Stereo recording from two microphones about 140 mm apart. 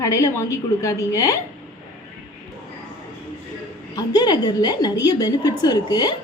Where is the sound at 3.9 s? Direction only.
30° left (ahead or behind).